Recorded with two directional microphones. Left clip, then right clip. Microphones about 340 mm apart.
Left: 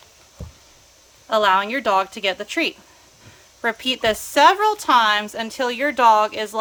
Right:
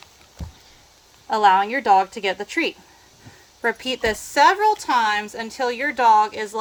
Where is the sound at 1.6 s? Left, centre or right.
Left.